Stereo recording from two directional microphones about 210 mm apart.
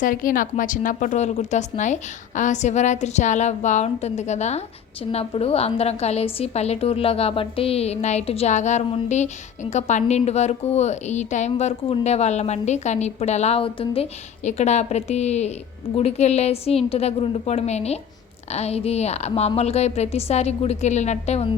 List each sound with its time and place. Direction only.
0.0 s a woman's voice: 40° left (ahead or behind)